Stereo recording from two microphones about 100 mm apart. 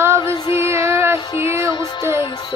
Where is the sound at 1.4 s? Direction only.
25° right (ahead or behind).